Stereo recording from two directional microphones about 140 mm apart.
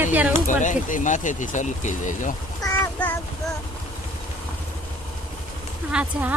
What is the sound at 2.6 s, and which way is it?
Child singing, 25° left (ahead or behind).